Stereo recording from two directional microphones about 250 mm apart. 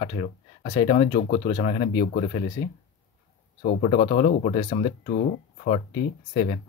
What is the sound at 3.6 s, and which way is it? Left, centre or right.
Speech, left.